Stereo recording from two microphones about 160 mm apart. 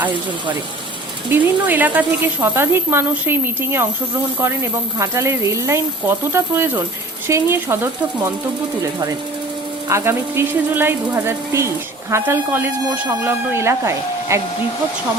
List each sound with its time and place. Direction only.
1.3 s speech: 10° right (ahead or behind)
4.9 s speech: 15° right (ahead or behind)
9.9 s speech: 15° right (ahead or behind)